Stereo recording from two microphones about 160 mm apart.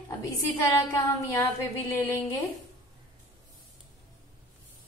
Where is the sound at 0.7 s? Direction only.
20° left (ahead or behind).